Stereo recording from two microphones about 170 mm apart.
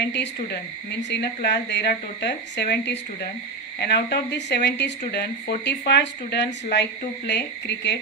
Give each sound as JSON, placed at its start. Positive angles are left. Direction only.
{"t": 0.0, "sound": "speech", "side_deg": 80}
{"t": 5.6, "sound": "speech", "side_deg": 90}